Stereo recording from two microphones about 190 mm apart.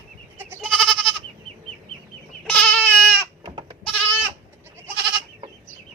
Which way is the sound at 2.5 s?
10° left (ahead or behind).